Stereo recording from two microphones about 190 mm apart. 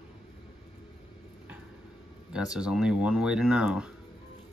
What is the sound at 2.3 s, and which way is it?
Speech, 5° right (ahead or behind).